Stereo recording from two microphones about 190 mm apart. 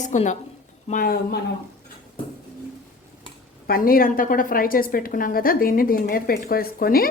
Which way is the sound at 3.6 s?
50° left (ahead or behind).